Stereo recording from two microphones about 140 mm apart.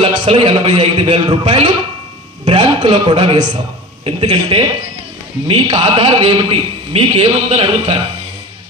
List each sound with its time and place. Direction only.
0.0 s a man's voice: 40° right (ahead or behind)